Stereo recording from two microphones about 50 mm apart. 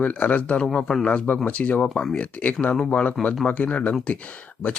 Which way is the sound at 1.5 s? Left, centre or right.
Left.